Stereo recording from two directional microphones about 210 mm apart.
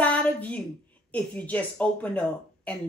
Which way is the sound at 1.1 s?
5° left (ahead or behind).